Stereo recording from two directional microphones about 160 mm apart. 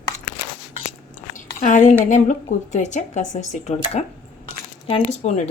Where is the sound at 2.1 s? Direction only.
50° left (ahead or behind).